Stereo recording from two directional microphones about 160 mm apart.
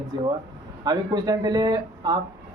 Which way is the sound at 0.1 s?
25° right (ahead or behind).